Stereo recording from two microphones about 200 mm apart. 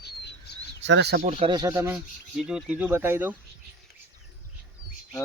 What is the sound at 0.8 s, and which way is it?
Speech, 60° right (ahead or behind).